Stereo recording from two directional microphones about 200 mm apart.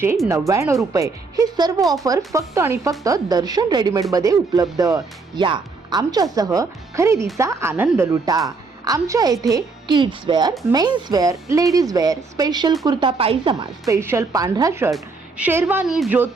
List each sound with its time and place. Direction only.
0.3 s a woman's voice: 15° right (ahead or behind)